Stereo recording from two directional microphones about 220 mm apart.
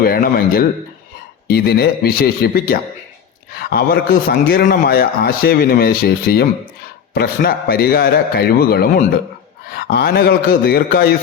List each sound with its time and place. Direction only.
0.0 s a man's voice: 45° left (ahead or behind)